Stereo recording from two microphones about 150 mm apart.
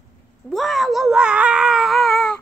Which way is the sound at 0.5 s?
Centre (ahead or behind).